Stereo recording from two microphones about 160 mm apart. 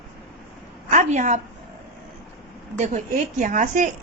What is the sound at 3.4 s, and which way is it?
Speech, 55° right (ahead or behind).